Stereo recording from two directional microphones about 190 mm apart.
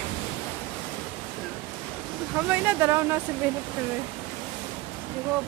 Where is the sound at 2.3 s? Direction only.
10° right (ahead or behind).